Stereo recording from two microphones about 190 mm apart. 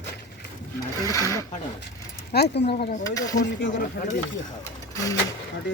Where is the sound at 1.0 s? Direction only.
15° left (ahead or behind).